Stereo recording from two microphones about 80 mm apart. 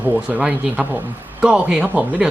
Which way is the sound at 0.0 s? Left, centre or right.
Centre.